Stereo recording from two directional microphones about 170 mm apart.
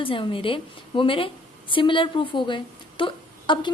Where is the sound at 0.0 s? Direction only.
30° left (ahead or behind).